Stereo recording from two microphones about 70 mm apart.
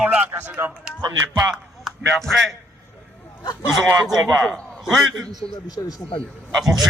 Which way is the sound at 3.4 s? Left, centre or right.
Left.